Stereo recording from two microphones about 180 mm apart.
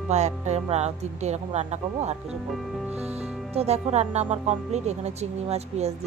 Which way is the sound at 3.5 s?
35° right (ahead or behind).